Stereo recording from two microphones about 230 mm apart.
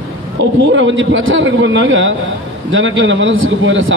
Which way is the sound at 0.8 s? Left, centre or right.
Right.